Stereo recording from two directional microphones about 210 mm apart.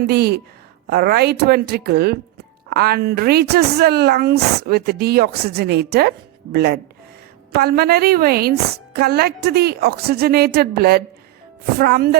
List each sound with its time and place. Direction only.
0.0 s speech: 50° right (ahead or behind)